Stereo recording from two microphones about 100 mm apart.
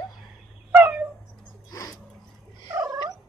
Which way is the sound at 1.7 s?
30° left (ahead or behind).